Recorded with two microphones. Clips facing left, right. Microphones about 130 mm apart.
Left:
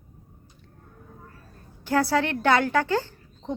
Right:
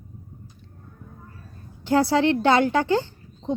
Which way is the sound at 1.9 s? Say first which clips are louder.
Right 4 dB; 25° right (ahead or behind).